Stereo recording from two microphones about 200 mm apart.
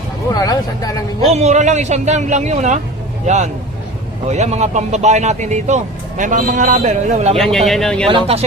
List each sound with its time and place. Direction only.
0.3 s speech: 20° left (ahead or behind)
1.3 s speech: 35° right (ahead or behind)
7.3 s speech: centre (ahead or behind)
8.0 s speech: 30° right (ahead or behind)